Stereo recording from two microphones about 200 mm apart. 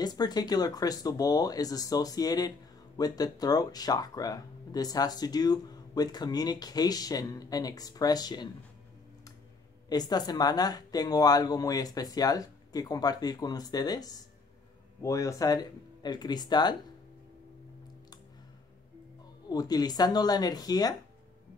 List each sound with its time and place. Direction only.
0.0 s speech: 20° left (ahead or behind)
9.8 s speech: 20° left (ahead or behind)
19.5 s speech: 20° left (ahead or behind)